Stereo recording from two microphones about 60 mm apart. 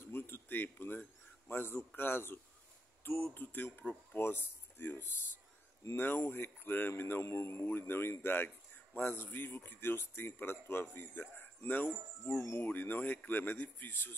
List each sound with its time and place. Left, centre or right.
0.1 s speech: left